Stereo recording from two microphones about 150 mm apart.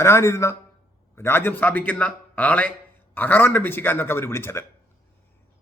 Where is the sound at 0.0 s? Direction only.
20° left (ahead or behind).